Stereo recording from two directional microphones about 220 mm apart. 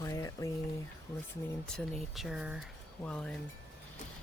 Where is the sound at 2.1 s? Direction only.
Centre (ahead or behind).